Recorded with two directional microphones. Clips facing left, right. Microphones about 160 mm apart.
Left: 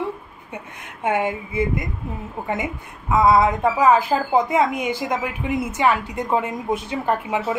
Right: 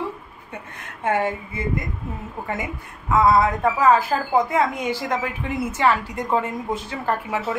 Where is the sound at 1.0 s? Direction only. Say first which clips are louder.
Left 1 dB; 15° left (ahead or behind).